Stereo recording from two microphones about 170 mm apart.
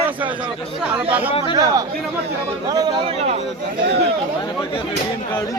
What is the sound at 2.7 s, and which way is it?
Speech, 25° right (ahead or behind).